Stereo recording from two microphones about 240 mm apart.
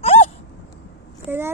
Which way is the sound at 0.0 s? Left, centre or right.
Left.